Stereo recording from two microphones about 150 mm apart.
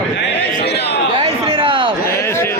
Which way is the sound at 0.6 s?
90° left.